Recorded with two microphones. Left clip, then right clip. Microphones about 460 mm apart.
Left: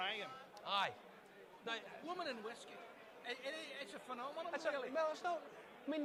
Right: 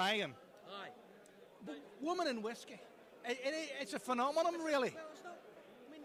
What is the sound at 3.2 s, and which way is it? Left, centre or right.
A man's voice, right.